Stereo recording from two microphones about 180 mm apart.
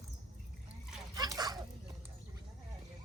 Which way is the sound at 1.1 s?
20° right (ahead or behind).